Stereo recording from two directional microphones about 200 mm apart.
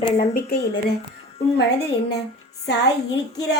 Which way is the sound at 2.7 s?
55° left (ahead or behind).